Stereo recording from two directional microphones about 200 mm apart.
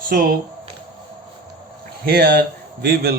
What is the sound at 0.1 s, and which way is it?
Speech, 45° right (ahead or behind).